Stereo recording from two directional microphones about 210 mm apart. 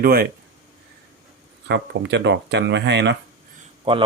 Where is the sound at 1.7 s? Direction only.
55° right (ahead or behind).